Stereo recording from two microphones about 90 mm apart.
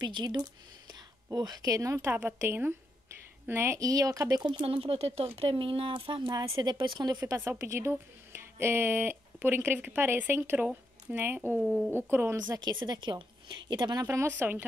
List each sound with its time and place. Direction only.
0.0 s a woman's voice: 60° right (ahead or behind); by 4.4 s 40° right (ahead or behind)
4.4 s speech: 65° right (ahead or behind)
6.6 s a woman's voice: 60° right (ahead or behind)
7.3 s speech: 30° right (ahead or behind)
11.6 s speech: 5° right (ahead or behind)
11.9 s speech: 25° right (ahead or behind)
12.4 s a woman's voice: 50° right (ahead or behind)
14.0 s speech: 30° right (ahead or behind)